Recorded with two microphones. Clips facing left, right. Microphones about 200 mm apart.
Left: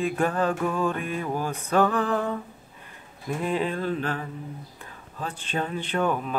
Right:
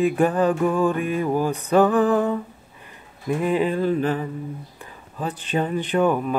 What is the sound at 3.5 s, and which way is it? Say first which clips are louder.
Mantra: right 6 dB; 10° right (ahead or behind).